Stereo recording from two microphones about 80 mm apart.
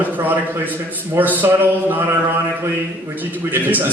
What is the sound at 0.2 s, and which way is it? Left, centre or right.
A man's voice, right.